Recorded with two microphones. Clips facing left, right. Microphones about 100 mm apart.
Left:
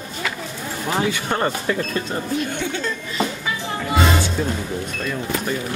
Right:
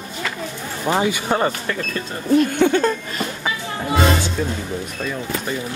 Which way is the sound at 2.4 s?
50° right (ahead or behind).